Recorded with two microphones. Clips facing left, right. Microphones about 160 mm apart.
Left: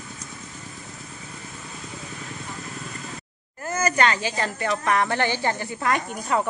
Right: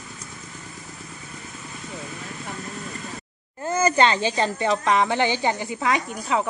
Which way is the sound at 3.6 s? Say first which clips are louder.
Right 3 dB; 25° right (ahead or behind).